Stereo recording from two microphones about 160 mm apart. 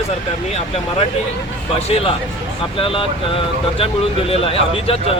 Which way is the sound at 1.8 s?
40° left (ahead or behind).